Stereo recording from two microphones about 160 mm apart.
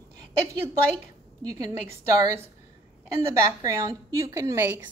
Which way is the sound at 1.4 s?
20° right (ahead or behind).